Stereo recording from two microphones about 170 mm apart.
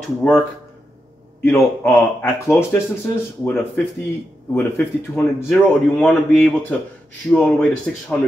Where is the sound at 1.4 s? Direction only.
15° left (ahead or behind).